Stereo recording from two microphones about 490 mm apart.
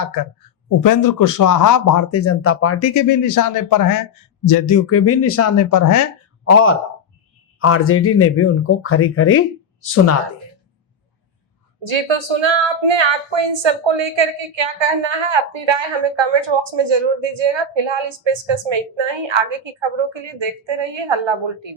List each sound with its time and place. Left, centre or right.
0.8 s speech: left
11.8 s speech: right